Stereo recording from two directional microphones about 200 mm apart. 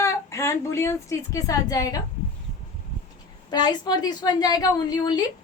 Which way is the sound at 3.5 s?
20° left (ahead or behind).